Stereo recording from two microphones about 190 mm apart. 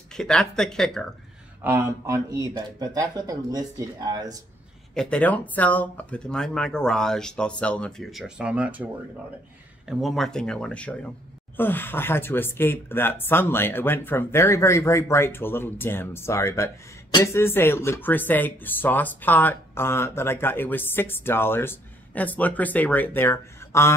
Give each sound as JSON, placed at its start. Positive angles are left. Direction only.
{"t": 0.1, "sound": "speech", "side_deg": 5}
{"t": 1.6, "sound": "speech", "side_deg": -10}
{"t": 4.9, "sound": "speech", "side_deg": 5}
{"t": 9.8, "sound": "speech", "side_deg": 0}